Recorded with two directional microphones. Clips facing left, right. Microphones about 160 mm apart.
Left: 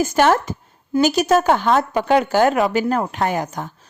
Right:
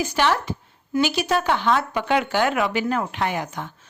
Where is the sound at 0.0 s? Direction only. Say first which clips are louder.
Left 6 dB; 45° left (ahead or behind).